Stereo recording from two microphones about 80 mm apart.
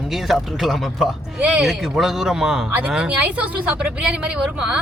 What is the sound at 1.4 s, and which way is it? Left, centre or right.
Speech, centre.